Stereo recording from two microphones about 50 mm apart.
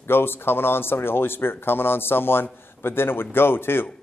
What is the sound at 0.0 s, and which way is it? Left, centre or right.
Speech, left.